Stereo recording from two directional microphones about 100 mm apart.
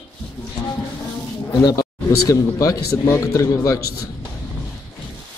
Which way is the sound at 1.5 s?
40° left (ahead or behind).